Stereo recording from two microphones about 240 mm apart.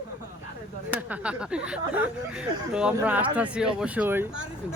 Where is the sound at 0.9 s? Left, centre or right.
Centre.